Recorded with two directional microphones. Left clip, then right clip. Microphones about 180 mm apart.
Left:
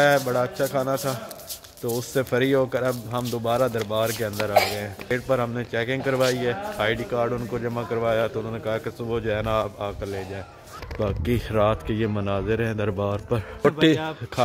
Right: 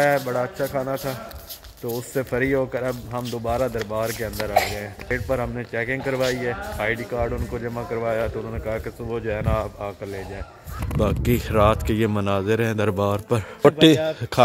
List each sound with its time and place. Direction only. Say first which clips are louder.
0.0 s speech: left 1 dB; 5° left (ahead or behind)
2.1 s speech: left 1 dB; 5° left (ahead or behind)
5.0 s speech: left 1 dB; 5° left (ahead or behind)
11.0 s speech: right 3 dB; 20° right (ahead or behind)